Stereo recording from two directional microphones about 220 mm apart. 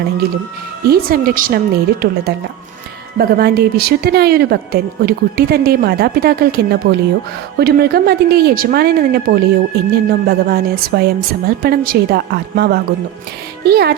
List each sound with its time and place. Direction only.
0.9 s a woman's voice: 45° right (ahead or behind)